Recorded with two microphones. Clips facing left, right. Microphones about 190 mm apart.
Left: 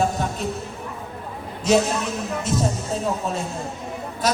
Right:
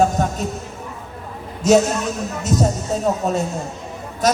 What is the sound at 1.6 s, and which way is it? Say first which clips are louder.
A man's voice: right 4 dB; 45° right (ahead or behind).